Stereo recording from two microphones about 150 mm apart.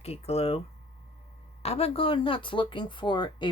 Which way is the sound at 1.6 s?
40° left (ahead or behind).